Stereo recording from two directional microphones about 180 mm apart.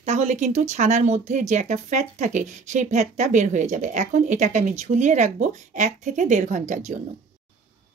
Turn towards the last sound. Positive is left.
turn(degrees=-40)  # may be behind; listen again after turning